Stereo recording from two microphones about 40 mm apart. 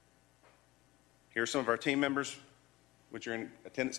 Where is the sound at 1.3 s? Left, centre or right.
Centre.